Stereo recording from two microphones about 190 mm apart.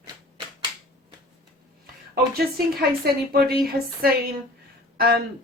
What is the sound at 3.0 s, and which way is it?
Speech, 55° right (ahead or behind).